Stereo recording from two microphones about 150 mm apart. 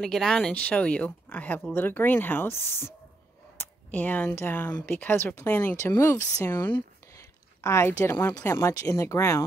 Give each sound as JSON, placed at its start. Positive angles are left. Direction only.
{"t": 0.0, "sound": "speech", "side_deg": 5}
{"t": 7.2, "sound": "a sound", "side_deg": 20}
{"t": 8.0, "sound": "speech", "side_deg": 15}